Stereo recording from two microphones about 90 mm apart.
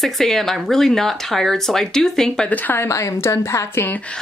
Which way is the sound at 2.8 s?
35° left (ahead or behind).